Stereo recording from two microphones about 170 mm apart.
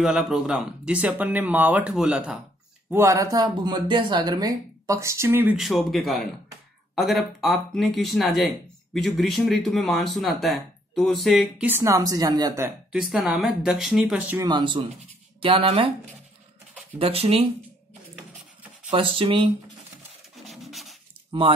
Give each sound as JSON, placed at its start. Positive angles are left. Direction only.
{"t": 0.0, "sound": "speech", "side_deg": -5}
{"t": 2.9, "sound": "speech", "side_deg": -15}
{"t": 5.6, "sound": "speech", "side_deg": 0}
{"t": 12.9, "sound": "speech", "side_deg": 0}
{"t": 14.4, "sound": "speech", "side_deg": -25}
{"t": 17.0, "sound": "speech", "side_deg": -35}
{"t": 18.9, "sound": "speech", "side_deg": -30}
{"t": 20.4, "sound": "scratch", "side_deg": 0}
{"t": 21.3, "sound": "speech", "side_deg": -30}